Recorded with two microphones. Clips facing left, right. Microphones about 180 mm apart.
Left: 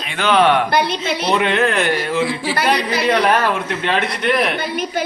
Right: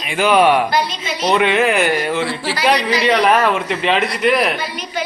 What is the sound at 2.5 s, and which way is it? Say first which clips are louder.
Speech: right 4 dB; 55° left (ahead or behind).